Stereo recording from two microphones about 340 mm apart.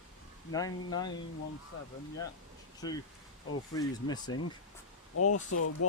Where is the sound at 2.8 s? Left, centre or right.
Centre.